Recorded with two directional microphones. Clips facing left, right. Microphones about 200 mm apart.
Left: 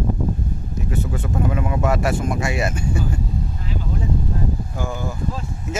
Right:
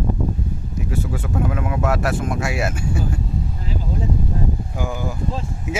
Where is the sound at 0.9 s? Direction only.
5° right (ahead or behind).